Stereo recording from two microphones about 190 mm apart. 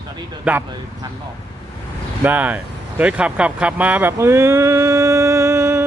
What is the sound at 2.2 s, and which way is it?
Speech, 10° right (ahead or behind).